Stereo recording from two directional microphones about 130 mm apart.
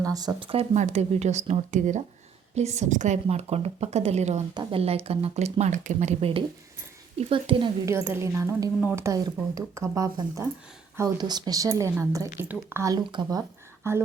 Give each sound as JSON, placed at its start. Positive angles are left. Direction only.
{"t": 0.0, "sound": "speech", "side_deg": -30}
{"t": 0.3, "sound": "a woman's voice", "side_deg": -45}
{"t": 4.5, "sound": "speech", "side_deg": -50}
{"t": 7.2, "sound": "speech", "side_deg": -45}
{"t": 7.9, "sound": "a woman's voice", "side_deg": -20}
{"t": 13.1, "sound": "speech", "side_deg": -40}
{"t": 13.8, "sound": "a woman's voice", "side_deg": -20}